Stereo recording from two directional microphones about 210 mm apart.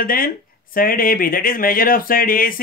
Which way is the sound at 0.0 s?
45° left (ahead or behind).